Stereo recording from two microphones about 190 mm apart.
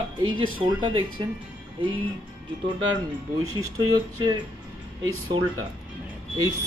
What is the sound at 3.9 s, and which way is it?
Speech, 20° right (ahead or behind).